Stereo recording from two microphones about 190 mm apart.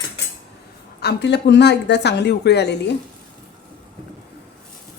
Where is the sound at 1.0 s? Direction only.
65° left (ahead or behind).